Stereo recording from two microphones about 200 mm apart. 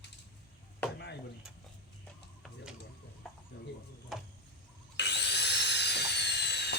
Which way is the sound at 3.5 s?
55° left (ahead or behind).